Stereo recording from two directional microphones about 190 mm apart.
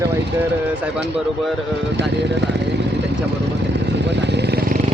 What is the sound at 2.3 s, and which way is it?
Speech, 65° right (ahead or behind).